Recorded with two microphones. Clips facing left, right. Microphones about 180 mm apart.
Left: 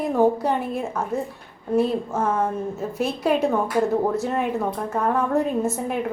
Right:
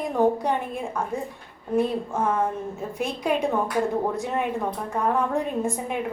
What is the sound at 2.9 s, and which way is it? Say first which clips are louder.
Speech: left 3 dB; 5° left (ahead or behind).